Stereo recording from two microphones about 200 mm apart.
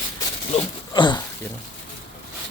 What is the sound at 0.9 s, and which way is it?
Speech, 20° left (ahead or behind).